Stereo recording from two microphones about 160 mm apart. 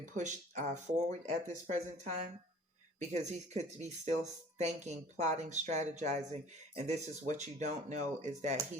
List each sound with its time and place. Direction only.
0.0 s speech: 50° right (ahead or behind)